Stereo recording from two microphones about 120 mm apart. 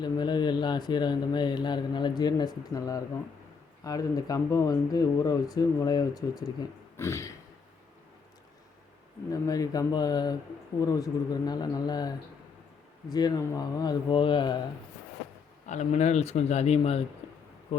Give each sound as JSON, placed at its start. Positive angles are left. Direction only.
{"t": 0.0, "sound": "speech", "side_deg": 40}
{"t": 6.9, "sound": "a sound", "side_deg": 25}
{"t": 9.3, "sound": "speech", "side_deg": 30}
{"t": 15.6, "sound": "a man's voice", "side_deg": 75}